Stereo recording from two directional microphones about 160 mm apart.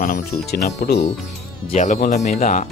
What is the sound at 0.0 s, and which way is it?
Speech, 60° left (ahead or behind).